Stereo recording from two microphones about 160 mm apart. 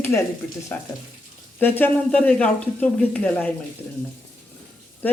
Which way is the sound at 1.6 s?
10° left (ahead or behind).